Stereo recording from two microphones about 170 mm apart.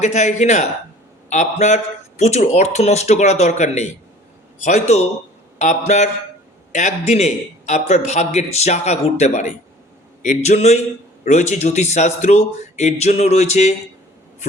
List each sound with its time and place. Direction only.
0.0 s a man's voice: 45° left (ahead or behind)